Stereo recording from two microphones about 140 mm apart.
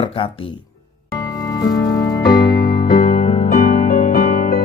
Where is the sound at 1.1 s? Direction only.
25° left (ahead or behind).